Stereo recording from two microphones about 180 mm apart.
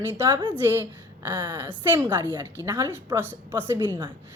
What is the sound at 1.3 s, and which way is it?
Speech, 25° right (ahead or behind).